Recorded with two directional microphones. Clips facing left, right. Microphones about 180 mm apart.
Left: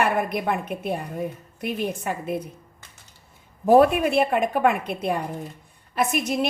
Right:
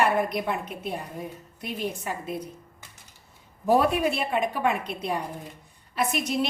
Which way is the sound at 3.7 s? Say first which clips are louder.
Left 6 dB; 55° left (ahead or behind).